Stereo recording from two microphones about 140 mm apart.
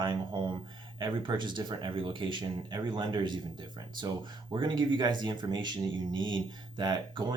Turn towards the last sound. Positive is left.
turn(degrees=-35)  # may be behind; listen again after turning